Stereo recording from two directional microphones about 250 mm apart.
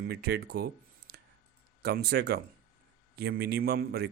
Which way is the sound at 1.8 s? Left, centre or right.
Right.